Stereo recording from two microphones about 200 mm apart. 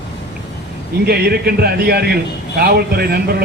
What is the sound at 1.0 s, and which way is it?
Speech, 50° right (ahead or behind).